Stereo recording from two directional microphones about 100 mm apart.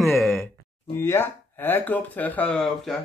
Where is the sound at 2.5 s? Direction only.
5° left (ahead or behind).